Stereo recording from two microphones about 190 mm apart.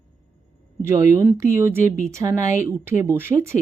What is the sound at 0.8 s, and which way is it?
Speech, 15° right (ahead or behind).